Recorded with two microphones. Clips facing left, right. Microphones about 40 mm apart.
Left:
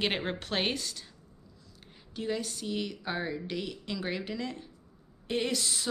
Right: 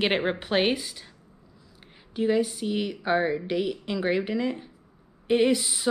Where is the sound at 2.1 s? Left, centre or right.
Centre.